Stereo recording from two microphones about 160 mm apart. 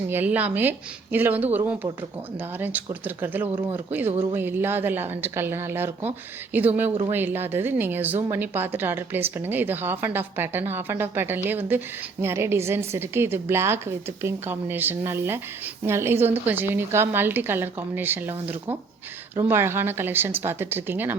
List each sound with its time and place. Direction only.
0.1 s a woman's voice: 10° right (ahead or behind)